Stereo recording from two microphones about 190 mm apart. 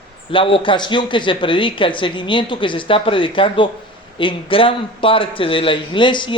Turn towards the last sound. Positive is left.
turn(degrees=25)  # may be behind; listen again after turning